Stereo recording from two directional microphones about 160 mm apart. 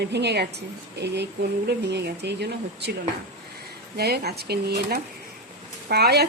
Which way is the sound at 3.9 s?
80° right.